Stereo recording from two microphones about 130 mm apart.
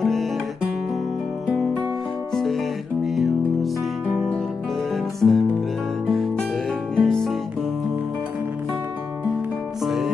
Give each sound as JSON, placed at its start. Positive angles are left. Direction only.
{"t": 0.0, "sound": "music", "side_deg": 0}
{"t": 2.3, "sound": "music", "side_deg": 0}
{"t": 9.8, "sound": "music", "side_deg": 0}